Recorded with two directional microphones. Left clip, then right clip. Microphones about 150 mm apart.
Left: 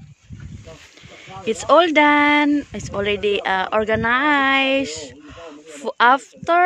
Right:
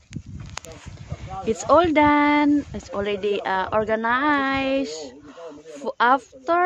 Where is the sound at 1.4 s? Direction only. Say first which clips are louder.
Left 3 dB; 5° left (ahead or behind).